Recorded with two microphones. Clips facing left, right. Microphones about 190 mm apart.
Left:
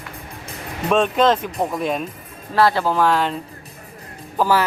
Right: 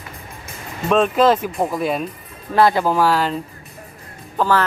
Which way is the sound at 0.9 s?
5° right (ahead or behind).